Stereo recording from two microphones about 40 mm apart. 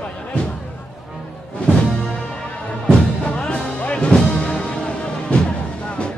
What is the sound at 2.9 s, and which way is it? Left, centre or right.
Music, left.